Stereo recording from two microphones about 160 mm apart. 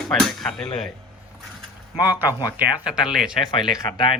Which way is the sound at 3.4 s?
30° left (ahead or behind).